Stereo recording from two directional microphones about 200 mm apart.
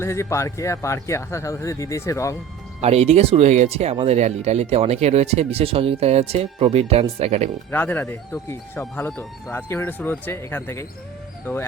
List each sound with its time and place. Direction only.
0.0 s speech: 15° left (ahead or behind)
2.8 s speech: 30° right (ahead or behind)
7.7 s speech: 10° left (ahead or behind)